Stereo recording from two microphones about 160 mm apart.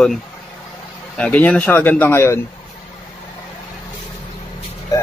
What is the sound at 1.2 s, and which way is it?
Speech, 10° left (ahead or behind).